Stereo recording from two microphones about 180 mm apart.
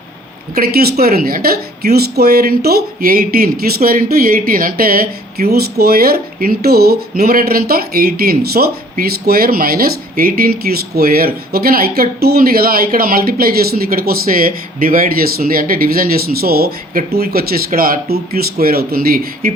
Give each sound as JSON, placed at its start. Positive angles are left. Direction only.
{"t": 0.5, "sound": "speech", "side_deg": -60}